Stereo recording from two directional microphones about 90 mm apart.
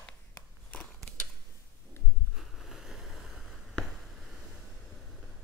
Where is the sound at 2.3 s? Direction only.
5° right (ahead or behind).